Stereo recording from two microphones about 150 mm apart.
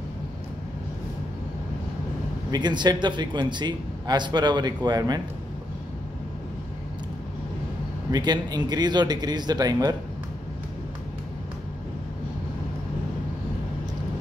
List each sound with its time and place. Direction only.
2.5 s a man's voice: 30° right (ahead or behind)
8.1 s a man's voice: 25° right (ahead or behind)